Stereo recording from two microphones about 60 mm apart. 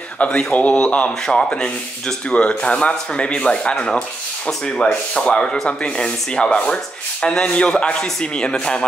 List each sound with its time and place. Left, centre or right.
0.2 s speech: centre